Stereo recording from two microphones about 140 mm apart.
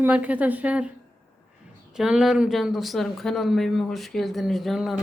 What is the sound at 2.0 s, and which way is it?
Speech, 5° right (ahead or behind).